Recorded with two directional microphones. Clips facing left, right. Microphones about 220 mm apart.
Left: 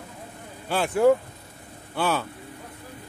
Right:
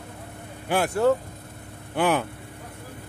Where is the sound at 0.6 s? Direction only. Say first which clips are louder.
Right 2 dB; 10° right (ahead or behind).